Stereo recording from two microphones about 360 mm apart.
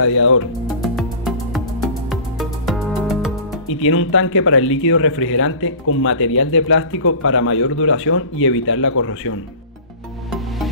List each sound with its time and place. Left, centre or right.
0.0 s speech: left
0.8 s music: centre
3.6 s speech: left